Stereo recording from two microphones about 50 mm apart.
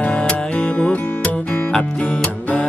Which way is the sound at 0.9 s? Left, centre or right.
Left.